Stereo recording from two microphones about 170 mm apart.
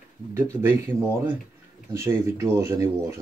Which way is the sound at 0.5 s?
15° right (ahead or behind).